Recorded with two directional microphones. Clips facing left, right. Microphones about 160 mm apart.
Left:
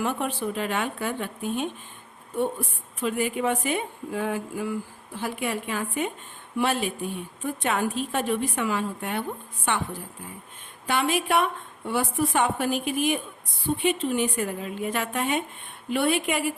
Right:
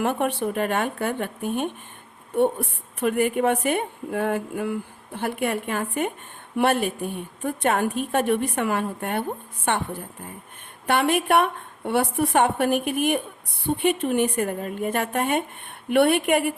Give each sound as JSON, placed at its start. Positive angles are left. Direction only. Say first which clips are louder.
{"t": 0.0, "sound": "a woman's voice", "louder": "right 4 dB", "side_deg": -55}